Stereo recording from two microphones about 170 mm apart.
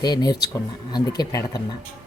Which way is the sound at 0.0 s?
25° left (ahead or behind).